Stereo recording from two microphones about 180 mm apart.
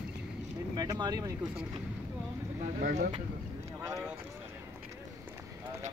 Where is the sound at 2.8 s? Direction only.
50° right (ahead or behind).